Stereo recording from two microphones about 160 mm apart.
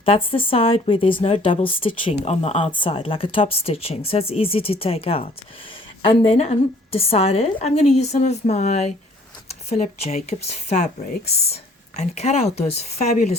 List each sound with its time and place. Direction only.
0.0 s a woman's voice: 35° left (ahead or behind)